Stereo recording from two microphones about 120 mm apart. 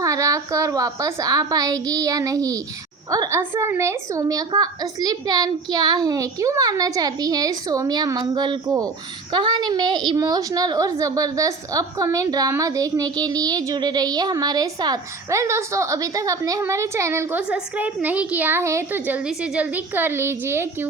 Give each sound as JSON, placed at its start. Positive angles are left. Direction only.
{"t": 0.0, "sound": "a woman's voice", "side_deg": -25}